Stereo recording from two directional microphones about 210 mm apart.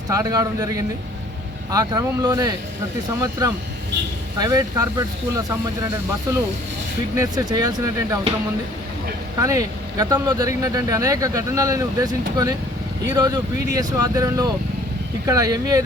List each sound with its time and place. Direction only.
0.1 s speech: 15° right (ahead or behind)
7.3 s speech: 20° right (ahead or behind)
9.4 s speech: 15° right (ahead or behind)